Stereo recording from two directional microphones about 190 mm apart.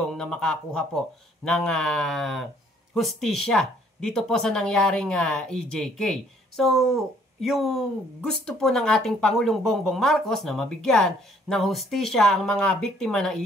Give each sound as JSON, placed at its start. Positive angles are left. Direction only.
{"t": 0.0, "sound": "speech", "side_deg": 0}